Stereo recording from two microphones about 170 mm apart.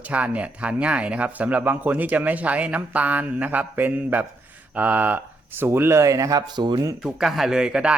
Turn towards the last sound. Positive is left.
turn(degrees=-5)  # may be behind; listen again after turning